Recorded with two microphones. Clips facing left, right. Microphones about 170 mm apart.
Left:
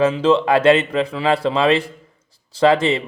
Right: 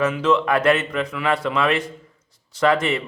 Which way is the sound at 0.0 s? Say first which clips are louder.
Left 4 dB; 30° left (ahead or behind).